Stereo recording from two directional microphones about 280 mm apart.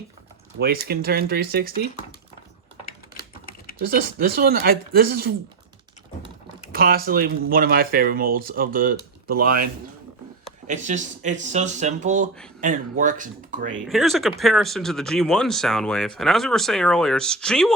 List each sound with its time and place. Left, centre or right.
0.6 s speech: right
3.8 s speech: right
6.7 s speech: right
10.7 s speech: right
13.8 s speech: centre